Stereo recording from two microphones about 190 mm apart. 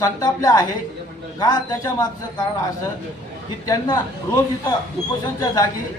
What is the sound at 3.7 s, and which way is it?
A man's voice, 20° left (ahead or behind).